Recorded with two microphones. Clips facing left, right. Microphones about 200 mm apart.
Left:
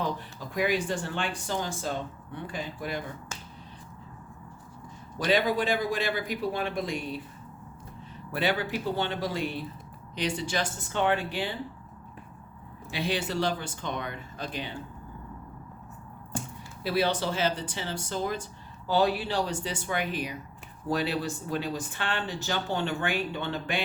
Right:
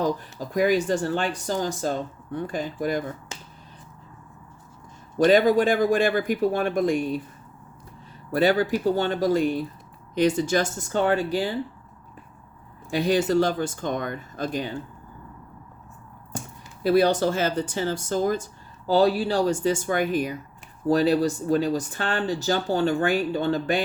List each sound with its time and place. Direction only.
0.0 s speech: 40° right (ahead or behind)
5.1 s speech: 45° right (ahead or behind)
8.3 s speech: 40° right (ahead or behind)
12.9 s speech: 45° right (ahead or behind)
16.8 s speech: 45° right (ahead or behind)